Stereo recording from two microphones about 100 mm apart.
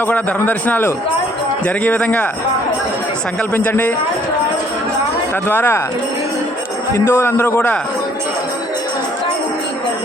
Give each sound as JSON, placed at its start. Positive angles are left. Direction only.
{"t": 0.1, "sound": "a man's voice", "side_deg": 15}
{"t": 3.5, "sound": "speech", "side_deg": 15}
{"t": 5.5, "sound": "a man's voice", "side_deg": 20}
{"t": 6.9, "sound": "a man's voice", "side_deg": 25}